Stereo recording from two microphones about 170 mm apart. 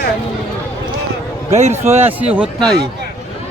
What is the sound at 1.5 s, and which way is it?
Speech, 40° right (ahead or behind).